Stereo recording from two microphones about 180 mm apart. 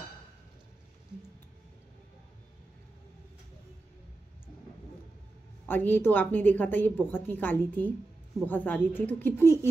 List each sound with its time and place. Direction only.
5.7 s a woman's voice: 10° left (ahead or behind)